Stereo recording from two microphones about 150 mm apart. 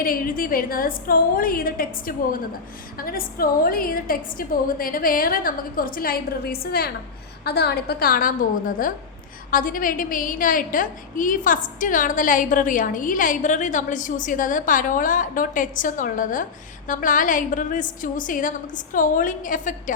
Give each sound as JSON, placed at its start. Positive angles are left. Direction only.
{"t": 0.0, "sound": "a woman's voice", "side_deg": 70}